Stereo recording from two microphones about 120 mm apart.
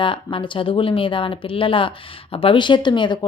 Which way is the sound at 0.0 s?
45° left (ahead or behind).